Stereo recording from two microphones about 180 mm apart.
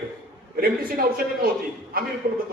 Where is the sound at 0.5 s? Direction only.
55° right (ahead or behind).